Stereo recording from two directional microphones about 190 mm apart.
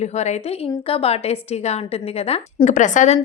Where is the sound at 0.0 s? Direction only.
35° left (ahead or behind).